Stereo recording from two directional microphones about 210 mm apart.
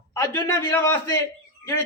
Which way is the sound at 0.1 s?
15° left (ahead or behind).